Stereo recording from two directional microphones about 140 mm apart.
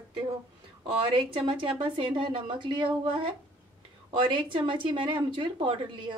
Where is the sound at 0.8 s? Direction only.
35° right (ahead or behind).